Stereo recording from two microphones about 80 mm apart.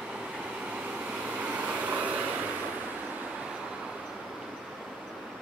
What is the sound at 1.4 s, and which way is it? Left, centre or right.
Vehicle, centre.